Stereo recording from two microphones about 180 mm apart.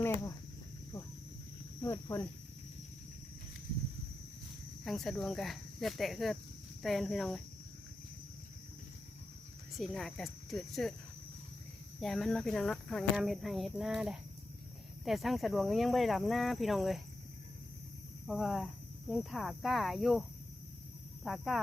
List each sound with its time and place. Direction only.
1.8 s speech: 15° left (ahead or behind)
4.8 s speech: centre (ahead or behind)
9.7 s speech: centre (ahead or behind)
11.9 s speech: centre (ahead or behind)
18.3 s speech: centre (ahead or behind)
21.2 s speech: centre (ahead or behind)